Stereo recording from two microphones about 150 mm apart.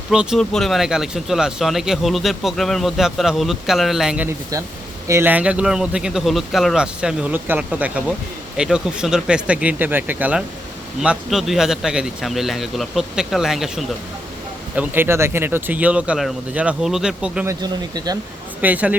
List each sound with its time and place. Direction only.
0.1 s speech: 5° right (ahead or behind)
5.0 s speech: 15° right (ahead or behind)
14.8 s speech: 15° right (ahead or behind)
17.4 s speech: 25° right (ahead or behind)
18.6 s speech: 10° right (ahead or behind)